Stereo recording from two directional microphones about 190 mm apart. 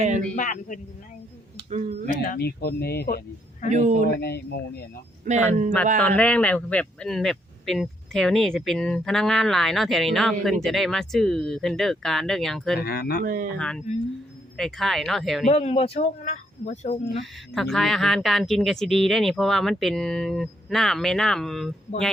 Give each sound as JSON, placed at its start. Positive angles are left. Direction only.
{"t": 0.0, "sound": "speech", "side_deg": -40}
{"t": 0.3, "sound": "speech", "side_deg": 45}
{"t": 2.2, "sound": "speech", "side_deg": 55}
{"t": 3.7, "sound": "speech", "side_deg": -40}
{"t": 4.2, "sound": "speech", "side_deg": 60}
{"t": 5.2, "sound": "speech", "side_deg": -40}
{"t": 6.0, "sound": "speech", "side_deg": 5}
{"t": 12.8, "sound": "speech", "side_deg": 55}
{"t": 13.2, "sound": "speech", "side_deg": -45}
{"t": 13.6, "sound": "speech", "side_deg": 5}
{"t": 15.4, "sound": "speech", "side_deg": 35}
{"t": 17.5, "sound": "speech", "side_deg": 0}